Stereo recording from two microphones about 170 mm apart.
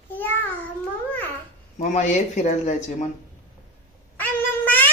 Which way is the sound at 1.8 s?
45° left (ahead or behind).